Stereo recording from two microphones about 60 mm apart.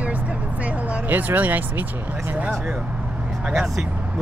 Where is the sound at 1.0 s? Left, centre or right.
Right.